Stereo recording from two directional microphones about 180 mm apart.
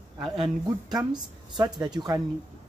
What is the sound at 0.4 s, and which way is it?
Speech, 25° right (ahead or behind).